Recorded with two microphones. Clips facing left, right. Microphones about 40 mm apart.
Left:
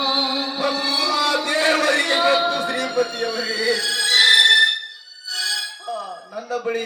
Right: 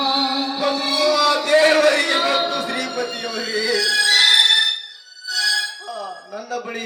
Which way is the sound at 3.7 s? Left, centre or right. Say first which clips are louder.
Right 4 dB; right.